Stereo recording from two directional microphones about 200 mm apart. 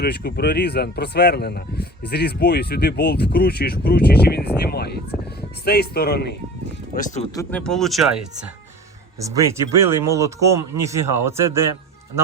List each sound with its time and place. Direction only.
0.0 s speech: 55° left (ahead or behind)
6.9 s speech: 40° left (ahead or behind)
7.3 s speech: 5° left (ahead or behind)
9.2 s speech: 15° right (ahead or behind)